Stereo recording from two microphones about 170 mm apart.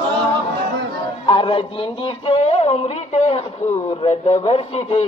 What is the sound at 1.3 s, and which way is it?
Speech, 30° left (ahead or behind).